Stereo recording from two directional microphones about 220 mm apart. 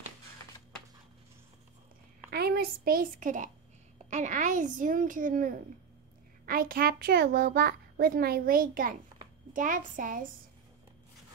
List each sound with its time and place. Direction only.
2.3 s a woman's voice: 45° right (ahead or behind)